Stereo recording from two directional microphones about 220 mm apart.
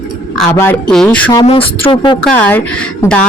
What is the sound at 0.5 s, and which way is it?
Speech, 5° left (ahead or behind).